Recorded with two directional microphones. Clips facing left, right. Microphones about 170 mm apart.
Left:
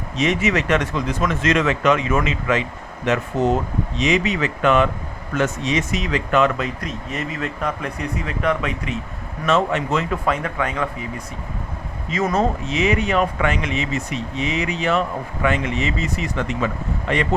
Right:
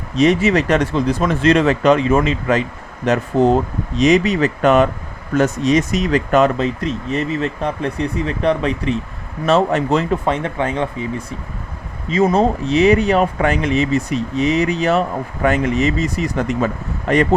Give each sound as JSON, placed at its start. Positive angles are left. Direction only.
{"t": 0.2, "sound": "speech", "side_deg": -35}